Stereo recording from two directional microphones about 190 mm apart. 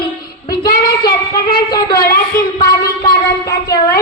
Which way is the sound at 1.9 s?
50° left (ahead or behind).